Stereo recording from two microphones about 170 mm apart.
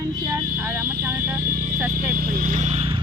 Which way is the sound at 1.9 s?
60° right (ahead or behind).